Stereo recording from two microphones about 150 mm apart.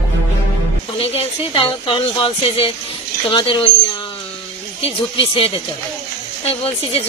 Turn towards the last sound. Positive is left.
turn(degrees=40)  # may be behind; listen again after turning